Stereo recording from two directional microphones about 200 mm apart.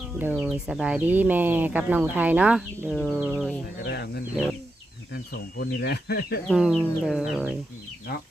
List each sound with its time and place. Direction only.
0.2 s speech: 10° right (ahead or behind)
3.8 s speech: 55° left (ahead or behind)
6.5 s speech: centre (ahead or behind)